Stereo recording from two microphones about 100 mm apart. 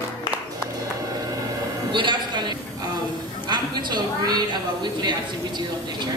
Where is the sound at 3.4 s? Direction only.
45° right (ahead or behind).